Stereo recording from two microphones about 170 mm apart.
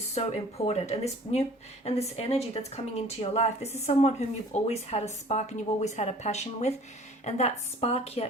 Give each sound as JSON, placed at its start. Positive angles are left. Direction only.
{"t": 0.1, "sound": "speech", "side_deg": 40}